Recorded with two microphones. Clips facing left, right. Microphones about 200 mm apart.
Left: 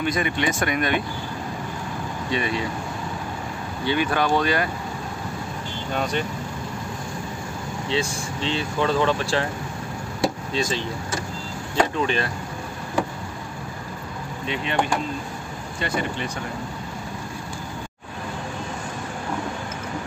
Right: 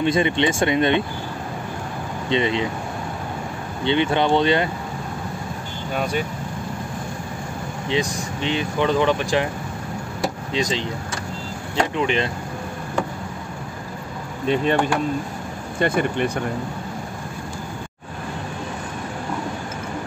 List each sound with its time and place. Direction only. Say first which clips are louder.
0.0 s speech: right 5 dB; 25° right (ahead or behind)
2.2 s speech: right 5 dB; 20° right (ahead or behind)
3.8 s speech: right 3 dB; 25° right (ahead or behind)
5.9 s speech: right 2 dB; 10° right (ahead or behind)
7.9 s speech: right 3 dB; 15° right (ahead or behind)
10.5 s speech: right 2 dB; 15° right (ahead or behind)
12.0 s speech: right 2 dB; 20° right (ahead or behind)
14.4 s speech: right 9 dB; 45° right (ahead or behind)
15.8 s speech: right 7 dB; 55° right (ahead or behind)